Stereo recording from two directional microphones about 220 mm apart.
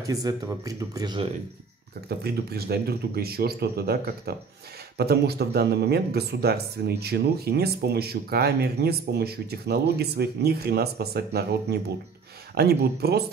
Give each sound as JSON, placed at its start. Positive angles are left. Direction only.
{"t": 0.0, "sound": "speech", "side_deg": -15}
{"t": 2.0, "sound": "speech", "side_deg": -45}